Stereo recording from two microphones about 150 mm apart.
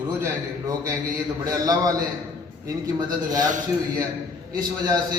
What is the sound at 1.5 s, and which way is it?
Speech, 25° right (ahead or behind).